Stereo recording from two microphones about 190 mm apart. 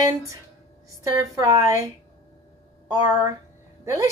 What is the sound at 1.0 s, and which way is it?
Speech, 20° right (ahead or behind).